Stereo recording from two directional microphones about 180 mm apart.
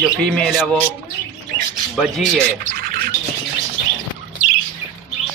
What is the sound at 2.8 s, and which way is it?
Bird, 55° right (ahead or behind).